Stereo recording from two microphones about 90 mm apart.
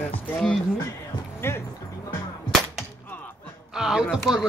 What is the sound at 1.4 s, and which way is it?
Speech, 30° left (ahead or behind).